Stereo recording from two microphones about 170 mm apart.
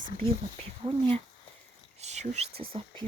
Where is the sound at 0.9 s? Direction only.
30° right (ahead or behind).